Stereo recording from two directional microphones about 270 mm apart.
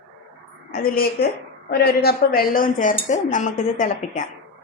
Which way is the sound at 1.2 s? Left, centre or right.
Left.